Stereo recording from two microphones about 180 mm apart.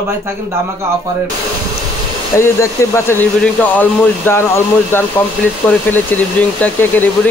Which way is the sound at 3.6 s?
10° left (ahead or behind).